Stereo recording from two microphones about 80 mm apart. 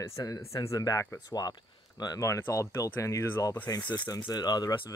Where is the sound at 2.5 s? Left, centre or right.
Left.